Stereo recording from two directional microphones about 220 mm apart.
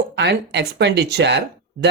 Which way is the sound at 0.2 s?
50° right (ahead or behind).